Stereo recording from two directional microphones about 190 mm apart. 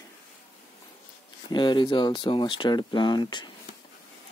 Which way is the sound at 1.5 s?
25° left (ahead or behind).